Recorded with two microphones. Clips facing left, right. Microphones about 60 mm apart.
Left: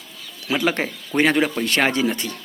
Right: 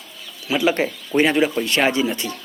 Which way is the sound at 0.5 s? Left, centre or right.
Left.